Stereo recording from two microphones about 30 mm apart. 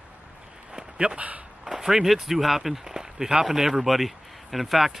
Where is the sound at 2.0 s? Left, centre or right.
Centre; by 3.4 s right.